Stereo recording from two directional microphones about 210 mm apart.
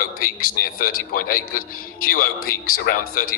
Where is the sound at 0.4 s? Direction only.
45° left (ahead or behind).